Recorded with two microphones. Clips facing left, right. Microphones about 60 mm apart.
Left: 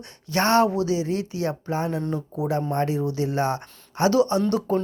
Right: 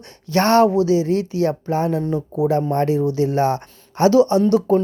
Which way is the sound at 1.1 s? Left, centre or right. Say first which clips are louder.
Right 7 dB; left.